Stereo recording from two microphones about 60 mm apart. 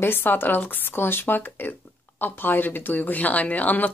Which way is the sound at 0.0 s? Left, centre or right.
Left.